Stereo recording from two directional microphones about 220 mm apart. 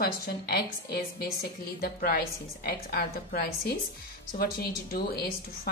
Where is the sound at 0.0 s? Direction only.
45° left (ahead or behind).